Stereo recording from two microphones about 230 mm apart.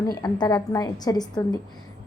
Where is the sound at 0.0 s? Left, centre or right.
Centre.